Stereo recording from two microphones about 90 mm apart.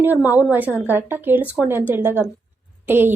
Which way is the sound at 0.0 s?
20° right (ahead or behind).